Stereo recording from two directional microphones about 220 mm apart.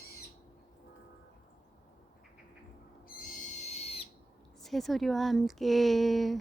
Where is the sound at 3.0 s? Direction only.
40° left (ahead or behind).